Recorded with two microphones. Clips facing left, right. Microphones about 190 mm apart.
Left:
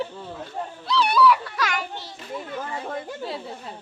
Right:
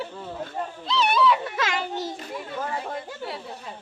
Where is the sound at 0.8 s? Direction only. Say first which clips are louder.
Left 2 dB; 20° right (ahead or behind).